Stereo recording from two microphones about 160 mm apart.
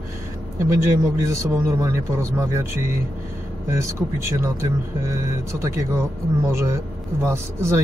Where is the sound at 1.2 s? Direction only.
20° right (ahead or behind).